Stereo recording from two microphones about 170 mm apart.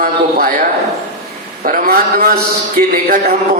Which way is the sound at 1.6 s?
55° right (ahead or behind).